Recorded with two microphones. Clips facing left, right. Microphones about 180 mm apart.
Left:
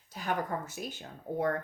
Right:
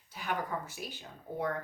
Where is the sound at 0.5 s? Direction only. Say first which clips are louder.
Left 2 dB; 50° left (ahead or behind).